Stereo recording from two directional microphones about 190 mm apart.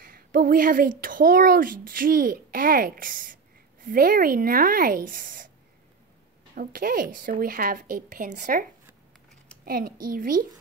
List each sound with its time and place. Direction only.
0.0 s a woman's voice: 50° right (ahead or behind)
6.5 s a woman's voice: 50° right (ahead or behind)
9.7 s a woman's voice: 50° right (ahead or behind)